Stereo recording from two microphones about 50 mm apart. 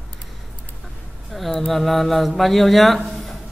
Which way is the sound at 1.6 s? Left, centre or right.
Centre.